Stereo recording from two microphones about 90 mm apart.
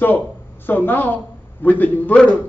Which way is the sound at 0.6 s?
20° left (ahead or behind).